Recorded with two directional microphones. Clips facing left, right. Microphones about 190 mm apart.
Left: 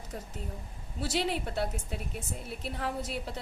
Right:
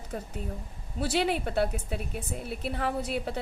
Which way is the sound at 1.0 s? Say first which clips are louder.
Right 4 dB; 60° right (ahead or behind).